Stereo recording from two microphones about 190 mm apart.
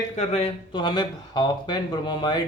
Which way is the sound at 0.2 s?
35° left (ahead or behind).